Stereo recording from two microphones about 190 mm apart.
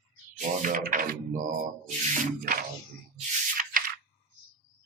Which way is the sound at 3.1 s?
45° right (ahead or behind).